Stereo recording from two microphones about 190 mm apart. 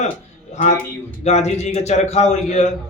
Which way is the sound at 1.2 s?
35° left (ahead or behind).